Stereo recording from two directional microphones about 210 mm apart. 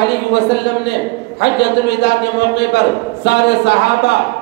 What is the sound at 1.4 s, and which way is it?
A man's voice, 55° left (ahead or behind).